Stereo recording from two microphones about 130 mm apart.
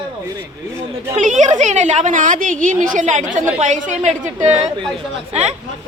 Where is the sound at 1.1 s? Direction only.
65° right (ahead or behind).